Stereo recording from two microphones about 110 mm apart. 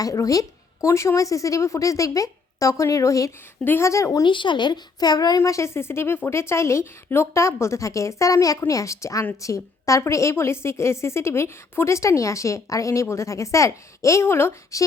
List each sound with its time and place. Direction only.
0.0 s a woman's voice: 30° left (ahead or behind)
4.2 s a child's voice: 45° left (ahead or behind)
5.4 s a woman's voice: 25° left (ahead or behind)